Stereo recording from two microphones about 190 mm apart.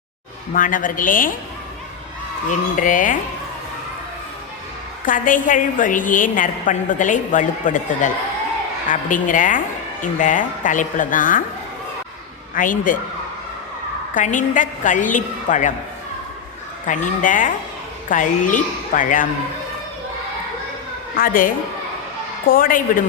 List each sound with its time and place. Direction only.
0.5 s a woman's voice: 45° left (ahead or behind)
2.7 s a woman's voice: 45° left (ahead or behind)
5.0 s a woman's voice: 45° left (ahead or behind)
12.5 s a woman's voice: 45° left (ahead or behind)
14.1 s a woman's voice: 40° left (ahead or behind)
16.8 s a woman's voice: 45° left (ahead or behind)
21.2 s a woman's voice: 45° left (ahead or behind)